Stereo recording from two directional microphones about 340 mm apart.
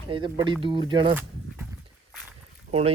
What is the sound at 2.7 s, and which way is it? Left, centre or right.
Speech, centre.